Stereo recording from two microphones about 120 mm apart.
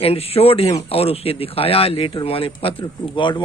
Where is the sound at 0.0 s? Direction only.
55° left (ahead or behind).